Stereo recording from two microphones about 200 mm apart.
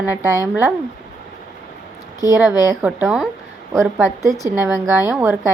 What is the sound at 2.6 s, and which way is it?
A woman's voice, 10° right (ahead or behind).